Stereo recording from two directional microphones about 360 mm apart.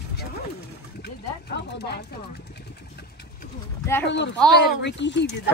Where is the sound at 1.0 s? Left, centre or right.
Left.